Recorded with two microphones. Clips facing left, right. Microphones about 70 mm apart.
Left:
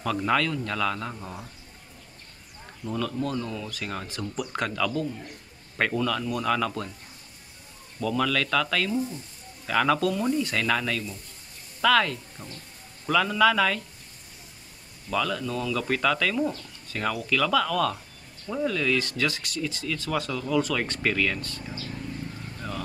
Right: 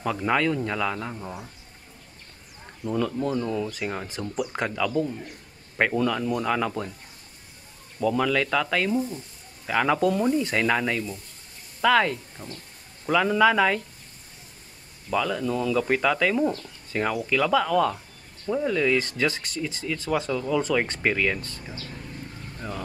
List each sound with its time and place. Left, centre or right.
0.0 s a man's voice: centre
2.8 s speech: centre
8.0 s speech: centre
15.0 s speech: centre